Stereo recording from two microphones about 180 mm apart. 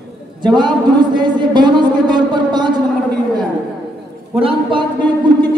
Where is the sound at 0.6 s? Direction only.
25° right (ahead or behind).